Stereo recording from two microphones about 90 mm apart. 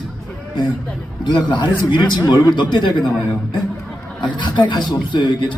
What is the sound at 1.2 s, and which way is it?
Speech, 55° left (ahead or behind).